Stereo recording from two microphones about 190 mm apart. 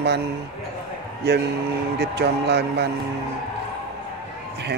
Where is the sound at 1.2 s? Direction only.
60° right (ahead or behind).